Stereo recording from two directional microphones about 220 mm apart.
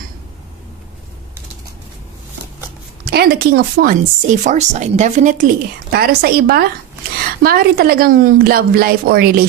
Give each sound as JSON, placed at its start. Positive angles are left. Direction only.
{"t": 3.0, "sound": "a woman's voice", "side_deg": -45}